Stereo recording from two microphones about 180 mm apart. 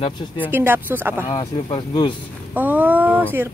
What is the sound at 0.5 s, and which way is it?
Speech, 10° right (ahead or behind).